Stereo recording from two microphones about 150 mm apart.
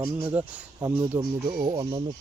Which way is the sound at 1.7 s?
35° right (ahead or behind).